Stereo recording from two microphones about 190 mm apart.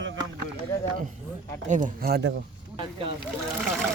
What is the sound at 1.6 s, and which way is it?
Speech, 40° right (ahead or behind).